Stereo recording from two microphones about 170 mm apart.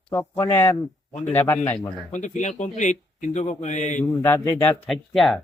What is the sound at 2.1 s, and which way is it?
A man's voice, 45° left (ahead or behind).